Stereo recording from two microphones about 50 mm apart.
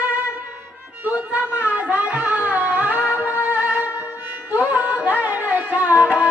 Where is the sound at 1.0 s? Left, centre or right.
Right.